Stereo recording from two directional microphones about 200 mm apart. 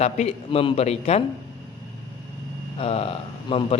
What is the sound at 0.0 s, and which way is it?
A man's voice, 30° left (ahead or behind).